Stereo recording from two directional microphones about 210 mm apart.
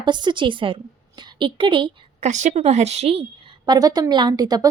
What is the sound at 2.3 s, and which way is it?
Speech, 35° right (ahead or behind).